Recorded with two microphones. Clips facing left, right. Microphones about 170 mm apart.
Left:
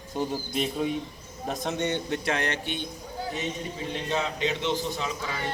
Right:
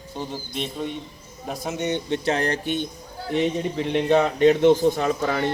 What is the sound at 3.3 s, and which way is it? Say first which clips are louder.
A man's voice: right 13 dB; 65° right (ahead or behind).